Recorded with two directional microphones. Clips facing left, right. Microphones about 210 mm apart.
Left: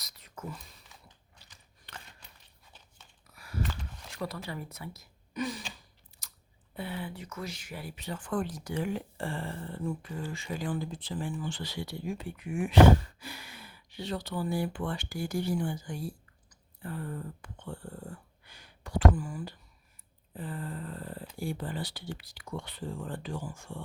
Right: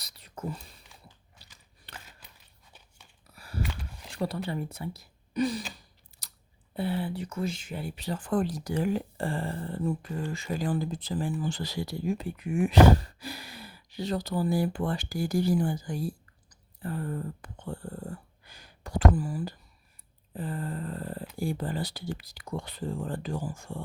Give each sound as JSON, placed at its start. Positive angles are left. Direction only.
{"t": 0.0, "sound": "whispering", "side_deg": -35}
{"t": 3.2, "sound": "a sound", "side_deg": -30}
{"t": 4.1, "sound": "speech", "side_deg": -30}
{"t": 6.7, "sound": "speech", "side_deg": -35}
{"t": 16.5, "sound": "a sound", "side_deg": -40}
{"t": 20.3, "sound": "speech", "side_deg": -40}